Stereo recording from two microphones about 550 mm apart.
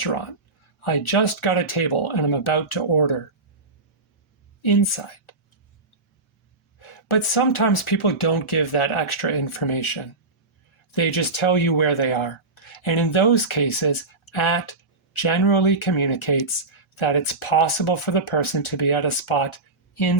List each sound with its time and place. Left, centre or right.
0.0 s speech: left
4.6 s speech: left
6.7 s speech: left